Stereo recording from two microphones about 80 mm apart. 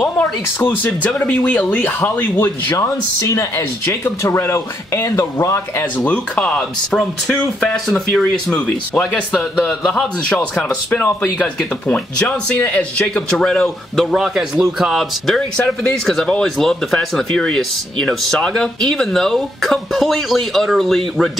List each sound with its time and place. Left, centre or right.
0.2 s speech: left
2.8 s speech: left
5.9 s speech: centre
8.5 s speech: centre